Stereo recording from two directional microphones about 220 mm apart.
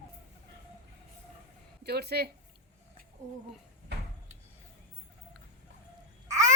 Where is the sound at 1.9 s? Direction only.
45° right (ahead or behind).